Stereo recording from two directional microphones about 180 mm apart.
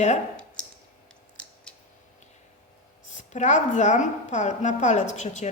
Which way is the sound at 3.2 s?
40° left (ahead or behind).